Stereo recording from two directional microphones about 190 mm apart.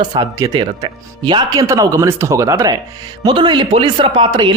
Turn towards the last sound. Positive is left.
turn(degrees=-25)  # may be behind; listen again after turning